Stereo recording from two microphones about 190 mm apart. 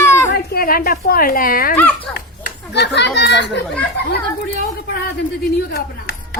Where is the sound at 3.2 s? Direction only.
65° left (ahead or behind).